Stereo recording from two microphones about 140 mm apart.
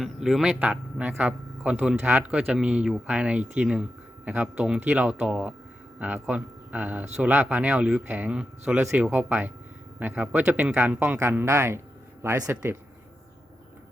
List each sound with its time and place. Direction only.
0.0 s speech: 5° right (ahead or behind); by 12.7 s 20° right (ahead or behind)